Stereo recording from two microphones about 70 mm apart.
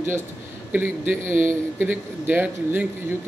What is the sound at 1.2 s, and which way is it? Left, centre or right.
A man's voice, right.